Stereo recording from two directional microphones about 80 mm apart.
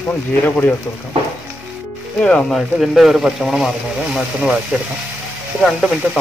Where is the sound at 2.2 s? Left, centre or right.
Centre.